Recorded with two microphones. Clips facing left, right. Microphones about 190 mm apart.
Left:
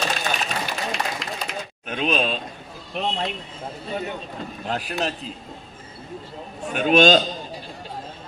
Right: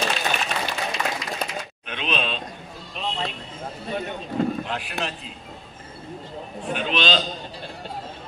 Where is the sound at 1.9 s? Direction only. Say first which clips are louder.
Left 5 dB; 45° left (ahead or behind).